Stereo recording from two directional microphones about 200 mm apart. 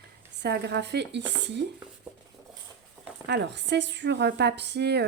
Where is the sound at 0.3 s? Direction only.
55° right (ahead or behind).